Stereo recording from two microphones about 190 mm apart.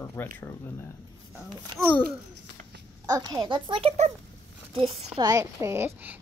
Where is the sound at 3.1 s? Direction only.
20° right (ahead or behind).